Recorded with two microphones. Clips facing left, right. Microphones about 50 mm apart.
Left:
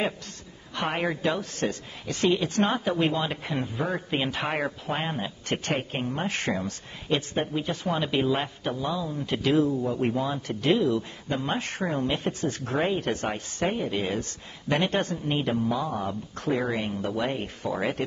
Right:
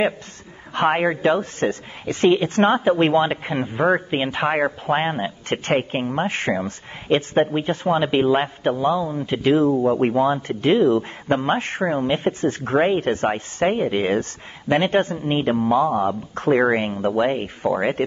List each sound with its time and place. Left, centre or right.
0.9 s speech: right
16.5 s speech: right